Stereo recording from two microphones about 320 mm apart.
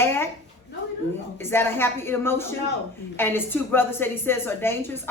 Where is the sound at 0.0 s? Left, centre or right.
Centre.